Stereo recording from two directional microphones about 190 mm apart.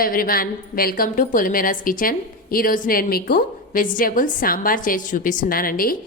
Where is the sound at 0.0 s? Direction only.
50° left (ahead or behind).